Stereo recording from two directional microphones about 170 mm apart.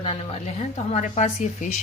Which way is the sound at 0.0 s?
35° left (ahead or behind).